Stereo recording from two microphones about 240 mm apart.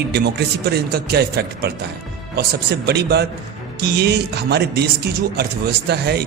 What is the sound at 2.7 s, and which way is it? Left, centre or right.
A man's voice, right.